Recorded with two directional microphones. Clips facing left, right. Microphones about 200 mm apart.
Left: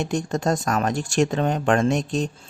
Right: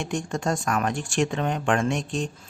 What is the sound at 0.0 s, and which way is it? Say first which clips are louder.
Speech: left 4 dB; 40° left (ahead or behind).